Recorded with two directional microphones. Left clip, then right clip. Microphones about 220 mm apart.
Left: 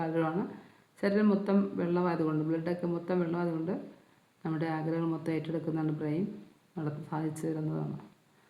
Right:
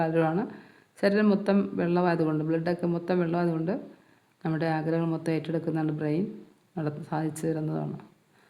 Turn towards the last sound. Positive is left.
turn(degrees=-40)  # may be behind; listen again after turning